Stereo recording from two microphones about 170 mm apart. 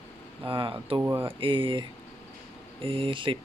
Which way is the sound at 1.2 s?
30° right (ahead or behind).